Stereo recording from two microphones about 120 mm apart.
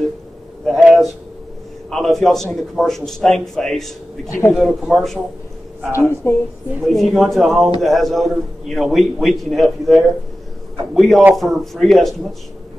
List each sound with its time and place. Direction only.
0.7 s a sound: centre (ahead or behind)
1.9 s a man's voice: centre (ahead or behind)
4.3 s a woman's voice: 20° left (ahead or behind)
4.6 s a man's voice: 5° right (ahead or behind)
5.9 s a woman's voice: 20° left (ahead or behind)
6.9 s a man's voice: centre (ahead or behind)